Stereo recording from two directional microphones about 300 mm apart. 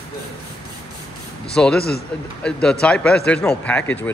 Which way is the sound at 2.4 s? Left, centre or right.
Centre.